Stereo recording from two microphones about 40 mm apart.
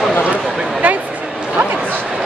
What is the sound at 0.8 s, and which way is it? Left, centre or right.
Speech, right.